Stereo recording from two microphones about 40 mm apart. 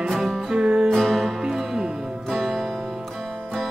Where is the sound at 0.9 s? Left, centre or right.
Centre.